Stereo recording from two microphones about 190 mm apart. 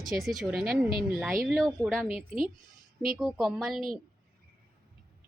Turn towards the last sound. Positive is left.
turn(degrees=0)  # may be behind; listen again after turning